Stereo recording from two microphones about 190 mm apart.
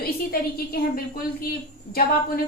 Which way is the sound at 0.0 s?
55° left (ahead or behind).